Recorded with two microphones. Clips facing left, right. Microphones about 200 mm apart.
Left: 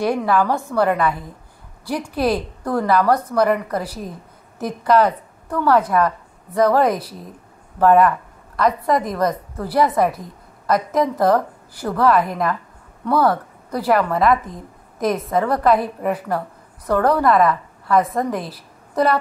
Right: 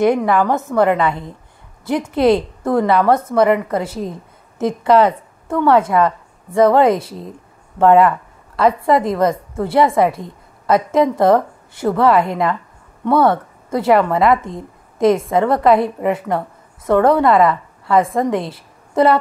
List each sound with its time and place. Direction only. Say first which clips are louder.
0.3 s a woman's voice: right 2 dB; 20° right (ahead or behind)